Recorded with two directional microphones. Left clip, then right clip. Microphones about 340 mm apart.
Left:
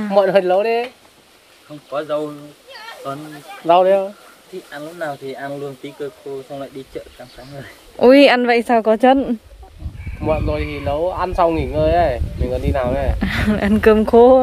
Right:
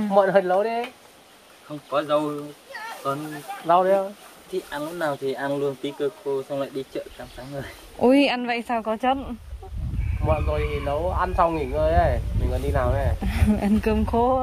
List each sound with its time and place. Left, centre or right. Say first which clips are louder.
0.1 s speech: left 5 dB; left
1.9 s speech: left 1 dB; centre
3.6 s speech: left 6 dB; left
4.7 s speech: left 2 dB; centre
8.0 s speech: left 9 dB; centre
8.4 s speech: left 11 dB; centre
10.2 s speech: left 5 dB; left
13.2 s speech: left 7 dB; centre